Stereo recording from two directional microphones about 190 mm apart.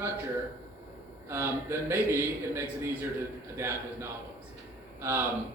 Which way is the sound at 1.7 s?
15° right (ahead or behind).